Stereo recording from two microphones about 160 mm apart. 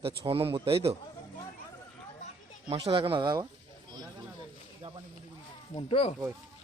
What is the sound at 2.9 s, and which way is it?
Speech, 35° right (ahead or behind).